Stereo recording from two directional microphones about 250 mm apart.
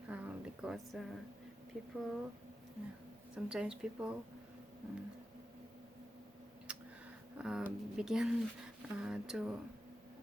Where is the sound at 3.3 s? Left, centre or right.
Centre.